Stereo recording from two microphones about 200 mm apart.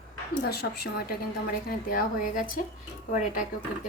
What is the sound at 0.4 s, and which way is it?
A woman's voice, 55° left (ahead or behind).